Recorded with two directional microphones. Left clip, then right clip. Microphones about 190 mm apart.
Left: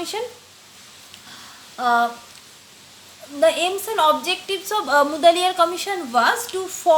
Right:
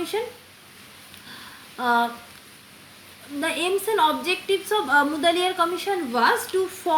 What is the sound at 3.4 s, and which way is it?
A woman's voice, 35° left (ahead or behind).